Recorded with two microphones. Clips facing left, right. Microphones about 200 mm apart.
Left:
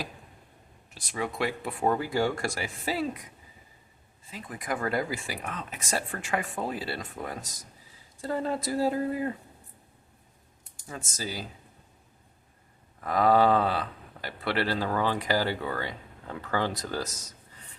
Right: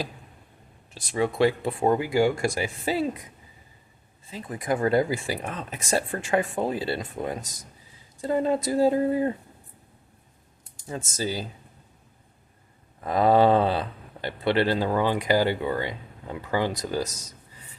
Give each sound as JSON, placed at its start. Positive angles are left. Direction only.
{"t": 0.9, "sound": "speech", "side_deg": -30}
{"t": 4.3, "sound": "speech", "side_deg": -30}
{"t": 10.8, "sound": "speech", "side_deg": -25}
{"t": 13.0, "sound": "speech", "side_deg": -25}